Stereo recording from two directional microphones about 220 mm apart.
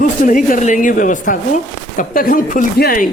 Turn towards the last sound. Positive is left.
turn(degrees=40)  # may be behind; listen again after turning